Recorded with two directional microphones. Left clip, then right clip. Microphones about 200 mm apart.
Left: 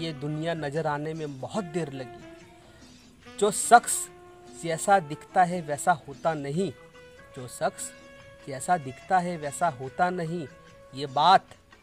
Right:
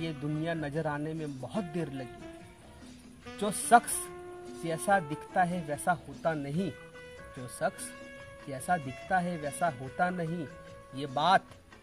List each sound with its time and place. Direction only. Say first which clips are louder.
0.4 s speech: left 5 dB; 45° left (ahead or behind)
3.3 s speech: left 5 dB; 45° left (ahead or behind)